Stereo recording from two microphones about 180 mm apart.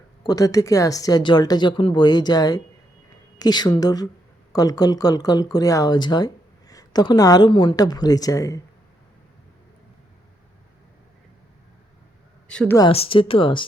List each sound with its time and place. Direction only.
0.2 s speech: 20° left (ahead or behind)
12.5 s speech: 5° left (ahead or behind)
12.9 s speech: 30° left (ahead or behind)